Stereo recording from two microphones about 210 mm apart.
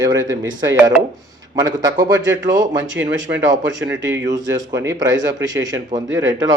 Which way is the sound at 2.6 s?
60° right (ahead or behind).